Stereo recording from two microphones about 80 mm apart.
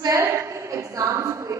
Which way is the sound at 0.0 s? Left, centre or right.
Right.